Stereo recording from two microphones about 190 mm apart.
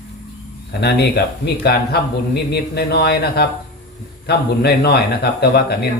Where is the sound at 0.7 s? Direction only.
60° left (ahead or behind).